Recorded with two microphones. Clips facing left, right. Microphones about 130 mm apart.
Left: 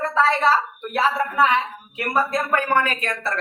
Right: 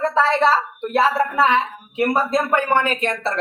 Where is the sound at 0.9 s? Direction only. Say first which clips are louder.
Right 3 dB; 30° right (ahead or behind).